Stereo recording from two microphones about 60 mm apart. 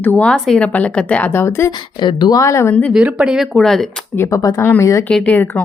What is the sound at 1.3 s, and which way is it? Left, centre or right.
Speech, left.